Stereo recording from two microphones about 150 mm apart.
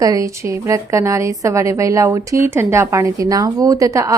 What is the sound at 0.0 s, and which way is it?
A woman's voice, 20° right (ahead or behind).